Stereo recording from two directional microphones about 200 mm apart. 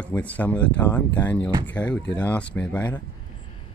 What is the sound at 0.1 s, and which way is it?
Speech, 5° left (ahead or behind).